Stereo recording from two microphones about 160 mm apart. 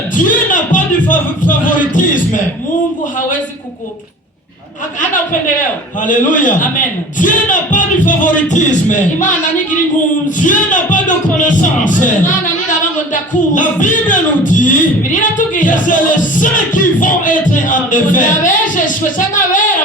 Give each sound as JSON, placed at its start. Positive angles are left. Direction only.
{"t": 0.1, "sound": "music", "side_deg": 55}
{"t": 5.5, "sound": "speech", "side_deg": 55}
{"t": 13.5, "sound": "speech", "side_deg": 55}